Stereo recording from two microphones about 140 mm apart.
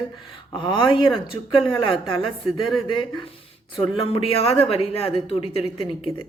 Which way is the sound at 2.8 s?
35° left (ahead or behind).